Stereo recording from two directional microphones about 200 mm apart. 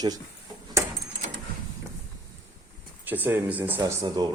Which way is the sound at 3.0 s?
10° right (ahead or behind).